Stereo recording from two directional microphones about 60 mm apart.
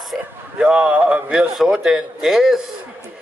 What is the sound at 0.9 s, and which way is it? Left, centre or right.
Speech, right.